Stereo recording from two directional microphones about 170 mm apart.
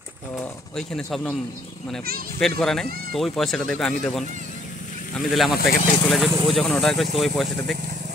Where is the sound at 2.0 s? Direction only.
60° right (ahead or behind).